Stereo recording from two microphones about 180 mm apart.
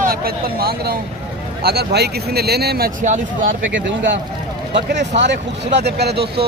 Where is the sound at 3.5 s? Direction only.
90° right.